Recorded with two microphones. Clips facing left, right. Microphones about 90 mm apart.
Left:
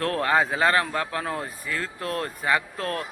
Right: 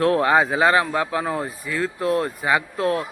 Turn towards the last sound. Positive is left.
turn(degrees=-15)  # may be behind; listen again after turning